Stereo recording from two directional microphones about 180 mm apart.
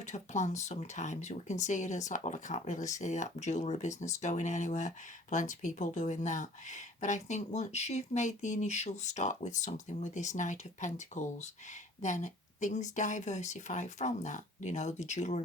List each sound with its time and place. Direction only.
0.0 s speech: 40° left (ahead or behind)